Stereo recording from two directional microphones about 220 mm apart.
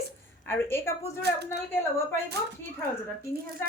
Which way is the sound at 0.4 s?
10° left (ahead or behind).